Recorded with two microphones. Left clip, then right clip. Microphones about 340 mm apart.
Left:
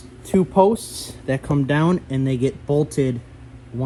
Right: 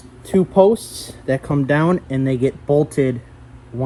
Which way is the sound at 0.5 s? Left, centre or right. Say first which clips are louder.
Right 3 dB; centre.